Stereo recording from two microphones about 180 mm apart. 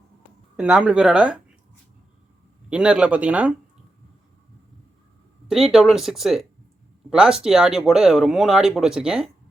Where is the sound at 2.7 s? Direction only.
5° right (ahead or behind).